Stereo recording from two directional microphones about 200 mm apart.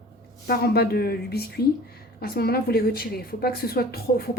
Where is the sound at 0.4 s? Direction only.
50° left (ahead or behind).